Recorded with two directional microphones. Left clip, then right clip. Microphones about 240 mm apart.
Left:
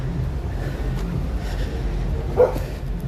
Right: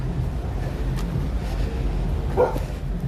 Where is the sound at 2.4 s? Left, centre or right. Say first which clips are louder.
Left 4 dB; left.